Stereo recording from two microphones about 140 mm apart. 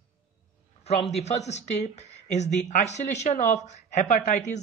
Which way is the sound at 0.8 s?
50° left (ahead or behind).